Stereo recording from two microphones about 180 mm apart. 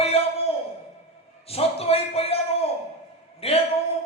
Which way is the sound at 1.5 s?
35° left (ahead or behind).